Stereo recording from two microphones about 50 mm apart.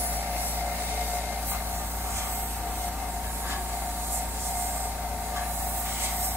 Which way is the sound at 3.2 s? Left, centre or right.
Right.